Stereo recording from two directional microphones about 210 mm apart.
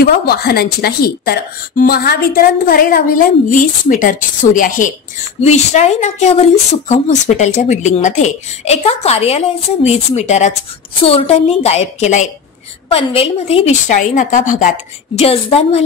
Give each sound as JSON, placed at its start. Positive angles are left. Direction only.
{"t": 0.0, "sound": "a woman's voice", "side_deg": 50}